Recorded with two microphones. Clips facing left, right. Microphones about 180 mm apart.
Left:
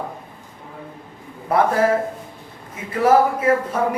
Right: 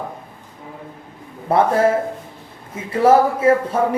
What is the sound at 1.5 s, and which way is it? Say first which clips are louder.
Speech: right 2 dB; 25° right (ahead or behind).